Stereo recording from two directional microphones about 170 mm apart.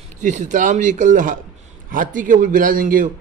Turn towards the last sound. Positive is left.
turn(degrees=-55)  # may be behind; listen again after turning